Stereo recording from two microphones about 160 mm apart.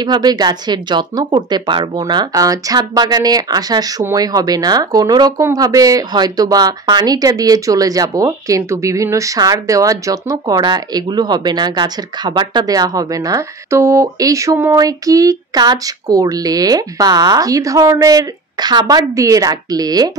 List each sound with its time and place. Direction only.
0.0 s speech: 25° right (ahead or behind)